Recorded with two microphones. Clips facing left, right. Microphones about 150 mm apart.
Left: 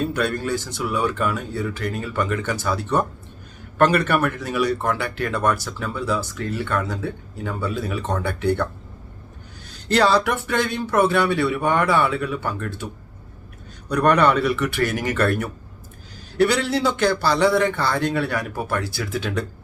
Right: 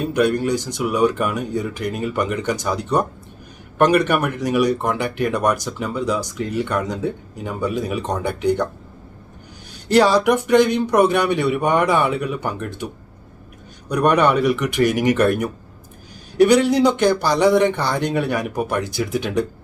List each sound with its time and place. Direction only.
0.0 s speech: 15° right (ahead or behind)
9.9 s speech: 10° right (ahead or behind)